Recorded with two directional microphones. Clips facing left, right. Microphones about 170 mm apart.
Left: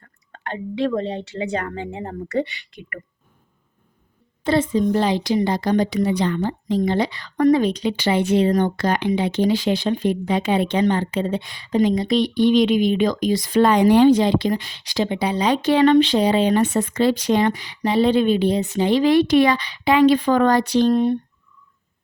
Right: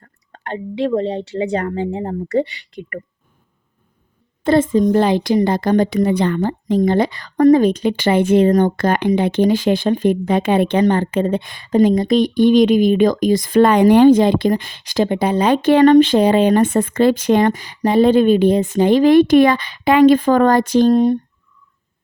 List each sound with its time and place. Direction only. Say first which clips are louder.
0.0 s speech: right 1 dB; 35° right (ahead or behind)
4.4 s a woman's voice: right 5 dB; 50° right (ahead or behind)